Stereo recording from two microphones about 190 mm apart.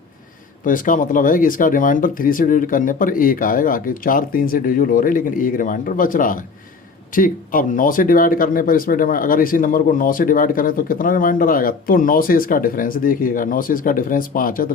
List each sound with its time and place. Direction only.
0.6 s speech: 45° left (ahead or behind)